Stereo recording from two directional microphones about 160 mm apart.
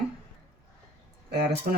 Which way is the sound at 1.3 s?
90° right.